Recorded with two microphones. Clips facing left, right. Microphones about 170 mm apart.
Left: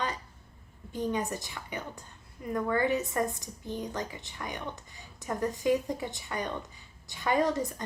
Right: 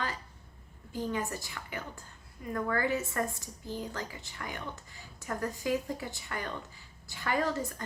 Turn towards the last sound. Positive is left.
turn(degrees=20)  # may be behind; listen again after turning